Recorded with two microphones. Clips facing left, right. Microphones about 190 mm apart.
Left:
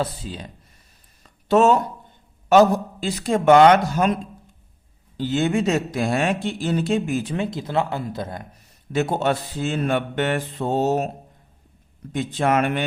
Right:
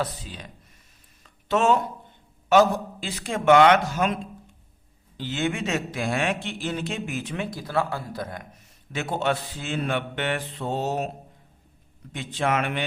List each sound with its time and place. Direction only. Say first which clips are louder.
0.0 s speech: left 4 dB; 30° left (ahead or behind)
1.2 s a sound: left 6 dB; 40° left (ahead or behind)
2.5 s a man's voice: left 4 dB; 40° left (ahead or behind)
8.9 s speech: left 5 dB; 40° left (ahead or behind)
12.1 s speech: left 5 dB; 45° left (ahead or behind)